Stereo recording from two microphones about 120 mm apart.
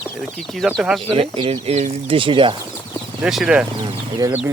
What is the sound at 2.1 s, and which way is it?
Speech, 45° right (ahead or behind).